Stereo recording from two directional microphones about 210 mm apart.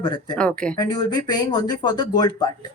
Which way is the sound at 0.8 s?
20° left (ahead or behind).